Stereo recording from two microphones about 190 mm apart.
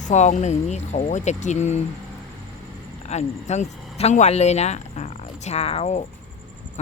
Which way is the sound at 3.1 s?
35° left (ahead or behind).